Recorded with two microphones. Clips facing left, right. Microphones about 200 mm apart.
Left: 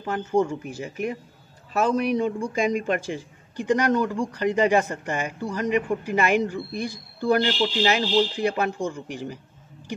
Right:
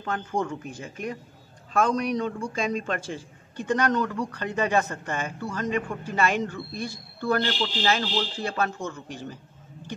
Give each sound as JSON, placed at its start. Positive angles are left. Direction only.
{"t": 0.0, "sound": "speech", "side_deg": 10}